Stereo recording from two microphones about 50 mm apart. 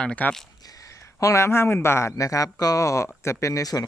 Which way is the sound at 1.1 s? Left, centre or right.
Left.